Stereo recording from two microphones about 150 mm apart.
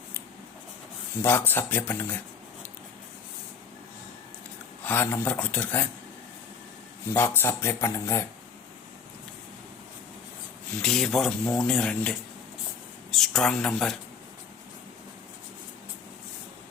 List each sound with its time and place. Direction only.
1.2 s speech: 15° left (ahead or behind)
4.8 s speech: 15° left (ahead or behind)
7.1 s speech: 15° left (ahead or behind)
10.8 s speech: centre (ahead or behind)